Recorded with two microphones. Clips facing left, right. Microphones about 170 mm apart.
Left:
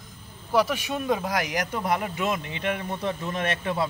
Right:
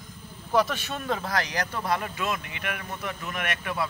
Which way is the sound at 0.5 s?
10° left (ahead or behind).